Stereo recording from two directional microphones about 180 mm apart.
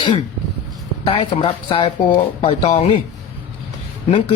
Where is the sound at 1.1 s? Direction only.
30° left (ahead or behind).